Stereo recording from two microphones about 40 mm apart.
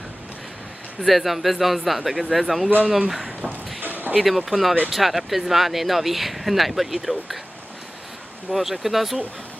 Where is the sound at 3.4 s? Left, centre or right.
Right.